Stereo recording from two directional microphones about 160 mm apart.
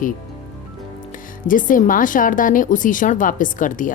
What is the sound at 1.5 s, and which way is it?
A woman's voice, 55° left (ahead or behind).